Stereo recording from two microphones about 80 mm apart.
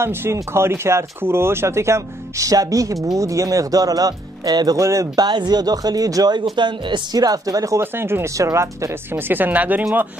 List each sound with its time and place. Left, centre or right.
0.0 s speech: right
5.2 s speech: right
6.5 s speech: right
7.8 s speech: right
9.1 s speech: right